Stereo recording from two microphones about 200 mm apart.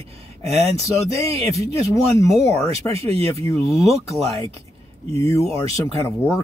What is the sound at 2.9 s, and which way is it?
Speech, 30° right (ahead or behind).